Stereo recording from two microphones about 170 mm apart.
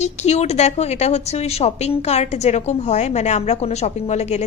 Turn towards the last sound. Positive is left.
turn(degrees=40)  # may be behind; listen again after turning